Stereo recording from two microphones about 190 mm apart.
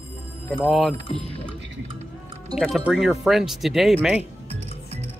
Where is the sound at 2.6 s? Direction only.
Centre (ahead or behind).